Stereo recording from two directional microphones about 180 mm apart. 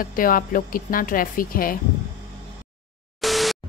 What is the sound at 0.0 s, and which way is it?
A woman's voice, 50° left (ahead or behind).